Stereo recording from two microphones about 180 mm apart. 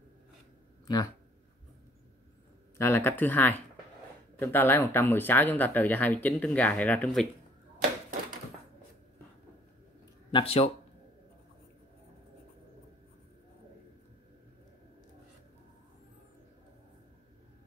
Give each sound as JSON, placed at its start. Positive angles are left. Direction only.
{"t": 0.9, "sound": "speech", "side_deg": 20}
{"t": 2.8, "sound": "speech", "side_deg": 10}
{"t": 10.3, "sound": "speech", "side_deg": 30}